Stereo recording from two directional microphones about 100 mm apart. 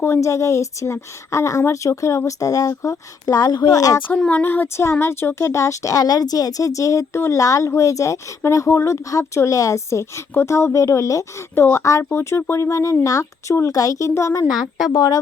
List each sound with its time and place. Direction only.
0.0 s a woman's voice: 30° left (ahead or behind)
4.2 s a woman's voice: 15° left (ahead or behind); by 14.4 s 30° left (ahead or behind)
14.5 s a woman's voice: centre (ahead or behind)
14.9 s speech: 45° left (ahead or behind)